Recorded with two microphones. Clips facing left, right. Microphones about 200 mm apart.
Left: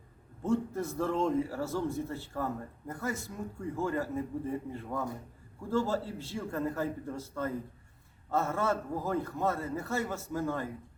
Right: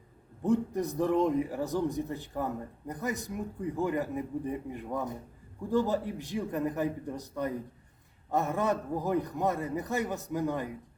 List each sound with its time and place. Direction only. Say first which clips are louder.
0.4 s a man's voice: right 3 dB; 15° right (ahead or behind)